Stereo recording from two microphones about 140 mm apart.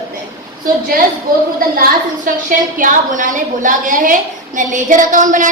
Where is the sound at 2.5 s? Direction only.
70° right (ahead or behind).